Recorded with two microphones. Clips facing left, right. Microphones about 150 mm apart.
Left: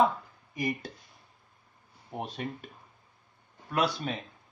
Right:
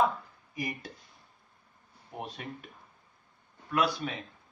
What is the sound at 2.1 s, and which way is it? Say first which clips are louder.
Speech: left 3 dB; 30° left (ahead or behind).